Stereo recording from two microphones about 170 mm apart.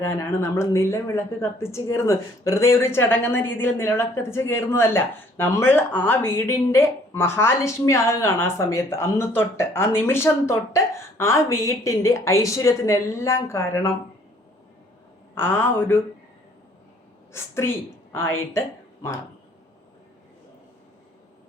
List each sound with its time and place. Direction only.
0.0 s speech: 15° left (ahead or behind)
15.4 s speech: 15° left (ahead or behind)
17.3 s speech: 15° left (ahead or behind)